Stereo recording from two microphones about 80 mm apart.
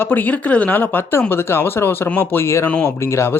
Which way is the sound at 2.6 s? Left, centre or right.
Centre.